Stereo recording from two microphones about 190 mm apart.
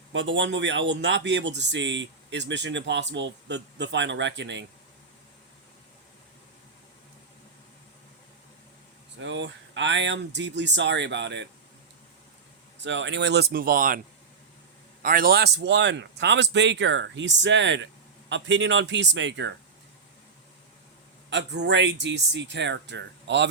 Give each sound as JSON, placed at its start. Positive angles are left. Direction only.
{"t": 0.1, "sound": "a man's voice", "side_deg": -75}
{"t": 9.1, "sound": "a man's voice", "side_deg": -75}
{"t": 12.8, "sound": "speech", "side_deg": -70}
{"t": 15.0, "sound": "a man's voice", "side_deg": -50}
{"t": 21.2, "sound": "a man's voice", "side_deg": -65}